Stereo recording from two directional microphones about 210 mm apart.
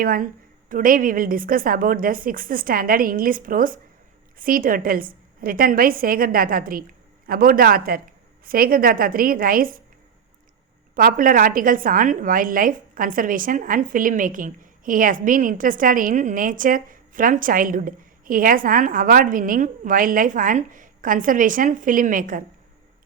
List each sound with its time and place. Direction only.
0.0 s a woman's voice: 45° right (ahead or behind)
10.9 s a woman's voice: 40° right (ahead or behind)